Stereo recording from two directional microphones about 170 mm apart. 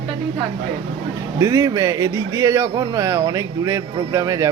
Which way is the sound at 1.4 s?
20° right (ahead or behind).